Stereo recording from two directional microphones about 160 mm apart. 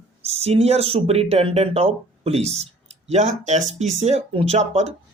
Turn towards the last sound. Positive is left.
turn(degrees=-45)  # may be behind; listen again after turning